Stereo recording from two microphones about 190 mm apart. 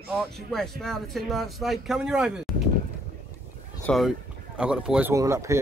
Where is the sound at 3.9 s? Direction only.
Centre (ahead or behind).